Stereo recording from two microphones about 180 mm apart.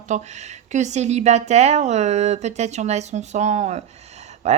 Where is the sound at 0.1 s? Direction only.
40° right (ahead or behind).